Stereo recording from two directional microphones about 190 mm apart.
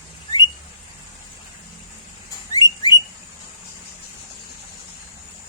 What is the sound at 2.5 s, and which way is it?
Bird, 20° left (ahead or behind).